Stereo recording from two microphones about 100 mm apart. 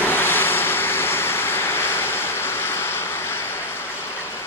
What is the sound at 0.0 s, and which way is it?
Vehicle, 20° left (ahead or behind).